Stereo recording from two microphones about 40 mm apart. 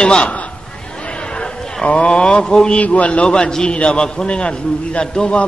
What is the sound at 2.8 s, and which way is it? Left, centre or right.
A man's voice, left.